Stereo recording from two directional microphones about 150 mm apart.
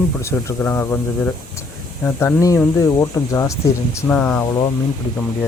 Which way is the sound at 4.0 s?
10° left (ahead or behind).